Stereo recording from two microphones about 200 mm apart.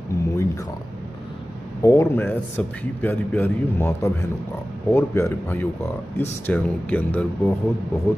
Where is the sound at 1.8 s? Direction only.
15° left (ahead or behind).